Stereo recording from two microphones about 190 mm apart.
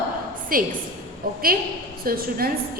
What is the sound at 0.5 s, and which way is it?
Speech, 50° right (ahead or behind).